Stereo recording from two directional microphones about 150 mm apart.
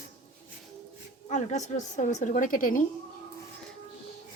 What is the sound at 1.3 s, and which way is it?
A woman's voice, 50° left (ahead or behind).